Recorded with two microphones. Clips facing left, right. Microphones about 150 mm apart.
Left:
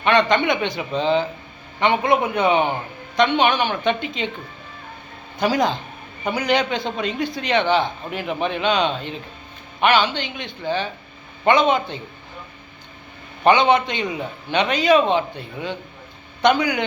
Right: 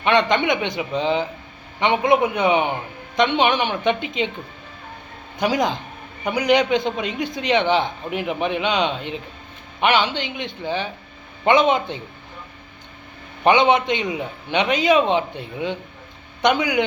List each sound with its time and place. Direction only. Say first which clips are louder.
0.0 s a man's voice: left 1 dB; 20° right (ahead or behind)
5.4 s a man's voice: left 1 dB; 20° right (ahead or behind)
13.4 s a man's voice: even; 20° right (ahead or behind)